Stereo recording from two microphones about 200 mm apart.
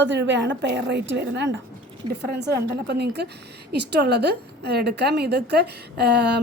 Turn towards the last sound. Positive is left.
turn(degrees=-55)  # may be behind; listen again after turning